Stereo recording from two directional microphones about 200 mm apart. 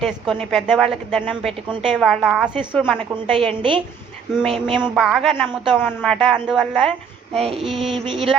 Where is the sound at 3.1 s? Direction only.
25° right (ahead or behind).